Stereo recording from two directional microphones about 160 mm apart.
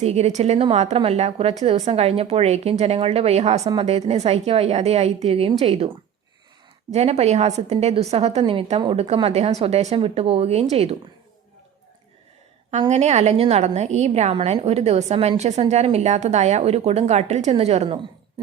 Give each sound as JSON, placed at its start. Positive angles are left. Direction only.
{"t": 0.0, "sound": "a woman's voice", "side_deg": -45}
{"t": 6.9, "sound": "a woman's voice", "side_deg": -40}
{"t": 12.9, "sound": "a woman's voice", "side_deg": -45}